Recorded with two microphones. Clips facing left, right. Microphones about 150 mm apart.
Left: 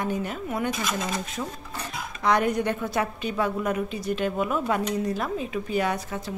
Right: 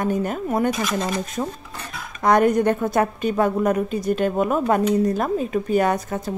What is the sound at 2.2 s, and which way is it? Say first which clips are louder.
A woman's voice: right 6 dB; 45° right (ahead or behind).